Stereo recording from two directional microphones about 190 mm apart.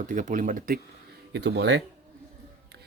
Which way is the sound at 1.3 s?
65° right (ahead or behind).